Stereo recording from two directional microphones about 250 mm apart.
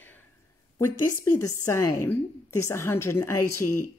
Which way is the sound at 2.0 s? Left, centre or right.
Centre.